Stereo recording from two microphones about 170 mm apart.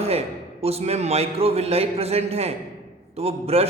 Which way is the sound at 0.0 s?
35° right (ahead or behind).